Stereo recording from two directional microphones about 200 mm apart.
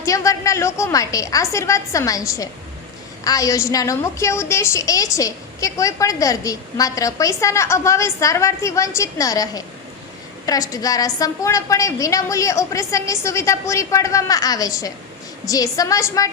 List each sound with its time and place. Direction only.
0.0 s a woman's voice: 15° left (ahead or behind)